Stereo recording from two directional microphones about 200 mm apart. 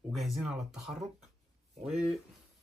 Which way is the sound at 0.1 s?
Centre (ahead or behind).